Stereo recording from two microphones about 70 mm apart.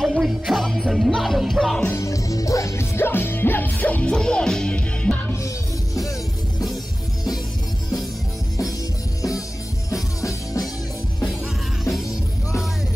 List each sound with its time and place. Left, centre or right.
0.0 s music: centre
1.9 s music: left; by 5.2 s centre
9.8 s music: left